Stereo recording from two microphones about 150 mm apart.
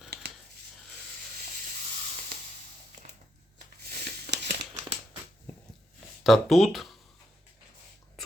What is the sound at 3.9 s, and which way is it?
Tearing, 90° right.